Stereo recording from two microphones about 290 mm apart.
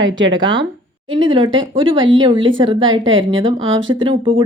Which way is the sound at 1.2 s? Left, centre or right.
Centre.